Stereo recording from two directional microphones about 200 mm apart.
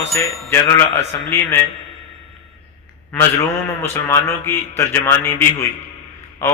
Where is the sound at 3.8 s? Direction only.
15° left (ahead or behind).